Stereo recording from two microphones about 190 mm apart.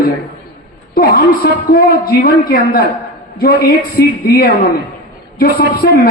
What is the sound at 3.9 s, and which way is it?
A man's voice, 55° left (ahead or behind).